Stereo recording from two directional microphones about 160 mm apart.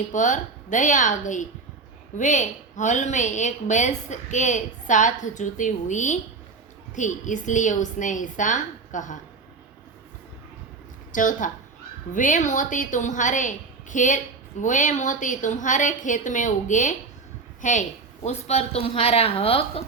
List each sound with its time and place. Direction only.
0.1 s a woman's voice: 50° left (ahead or behind)
11.1 s a woman's voice: 55° left (ahead or behind); by 19.8 s 35° left (ahead or behind)